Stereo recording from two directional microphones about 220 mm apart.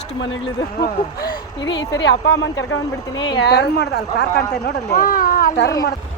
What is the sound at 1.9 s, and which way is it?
Speech, 55° left (ahead or behind).